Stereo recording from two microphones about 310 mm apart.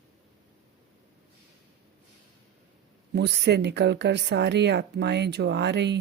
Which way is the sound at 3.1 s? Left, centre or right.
Right.